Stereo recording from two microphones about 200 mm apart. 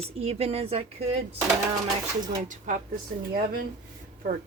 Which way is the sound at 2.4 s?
40° right (ahead or behind).